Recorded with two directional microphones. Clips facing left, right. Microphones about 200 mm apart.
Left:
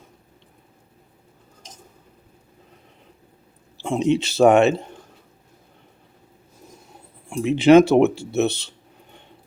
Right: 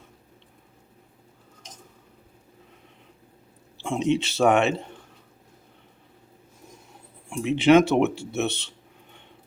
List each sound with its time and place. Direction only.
3.8 s speech: 35° left (ahead or behind)
7.3 s speech: 40° left (ahead or behind)